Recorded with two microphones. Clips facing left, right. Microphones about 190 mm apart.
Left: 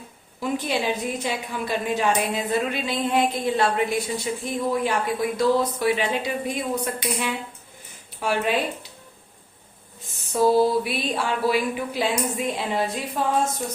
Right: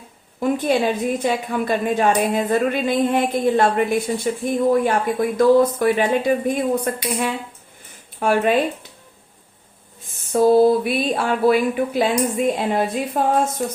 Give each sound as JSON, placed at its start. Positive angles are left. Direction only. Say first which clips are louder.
{"t": 0.3, "sound": "a woman's voice", "louder": "right 7 dB", "side_deg": -50}
{"t": 10.2, "sound": "a woman's voice", "louder": "right 5 dB", "side_deg": -55}